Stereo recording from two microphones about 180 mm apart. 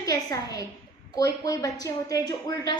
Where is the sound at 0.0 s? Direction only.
20° left (ahead or behind).